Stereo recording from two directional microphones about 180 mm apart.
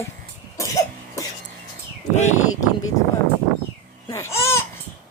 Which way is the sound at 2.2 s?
40° left (ahead or behind).